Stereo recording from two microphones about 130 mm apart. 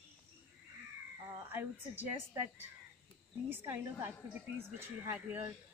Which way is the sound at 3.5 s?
15° right (ahead or behind).